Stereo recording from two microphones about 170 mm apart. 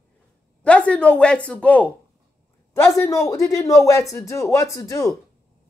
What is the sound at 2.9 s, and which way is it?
Speech, 15° left (ahead or behind).